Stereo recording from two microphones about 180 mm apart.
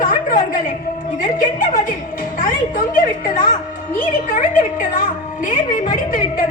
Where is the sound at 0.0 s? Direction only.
50° left (ahead or behind).